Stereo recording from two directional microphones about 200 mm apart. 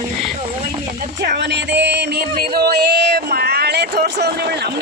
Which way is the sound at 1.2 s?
60° right (ahead or behind).